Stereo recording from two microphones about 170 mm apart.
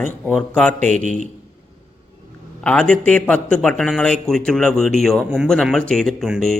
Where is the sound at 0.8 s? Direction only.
45° right (ahead or behind).